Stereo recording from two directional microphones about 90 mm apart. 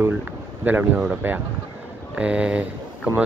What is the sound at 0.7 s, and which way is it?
Speech, 15° right (ahead or behind).